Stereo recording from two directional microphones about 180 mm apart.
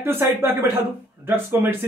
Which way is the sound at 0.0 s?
15° right (ahead or behind).